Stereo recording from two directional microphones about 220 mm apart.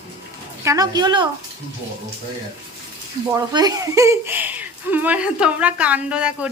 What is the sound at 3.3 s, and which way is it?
Speech, 20° right (ahead or behind).